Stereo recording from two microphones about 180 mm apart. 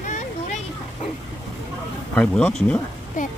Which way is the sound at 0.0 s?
45° left (ahead or behind).